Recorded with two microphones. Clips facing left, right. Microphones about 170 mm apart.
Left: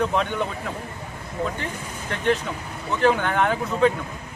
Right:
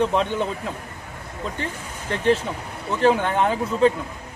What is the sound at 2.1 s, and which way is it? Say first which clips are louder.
A man's voice: right 3 dB; 30° right (ahead or behind).